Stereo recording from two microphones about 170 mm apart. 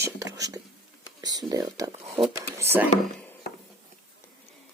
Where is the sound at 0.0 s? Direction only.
20° right (ahead or behind).